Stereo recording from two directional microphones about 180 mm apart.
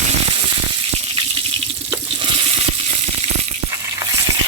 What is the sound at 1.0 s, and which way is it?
Water, 30° right (ahead or behind).